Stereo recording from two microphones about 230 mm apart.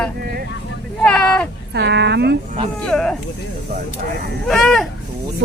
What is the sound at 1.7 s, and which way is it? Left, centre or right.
Speech, right.